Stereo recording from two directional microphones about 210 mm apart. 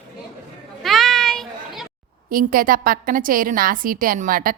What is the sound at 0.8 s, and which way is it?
Children playing, centre (ahead or behind).